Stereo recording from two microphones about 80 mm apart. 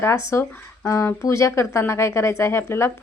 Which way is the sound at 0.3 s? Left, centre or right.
Left.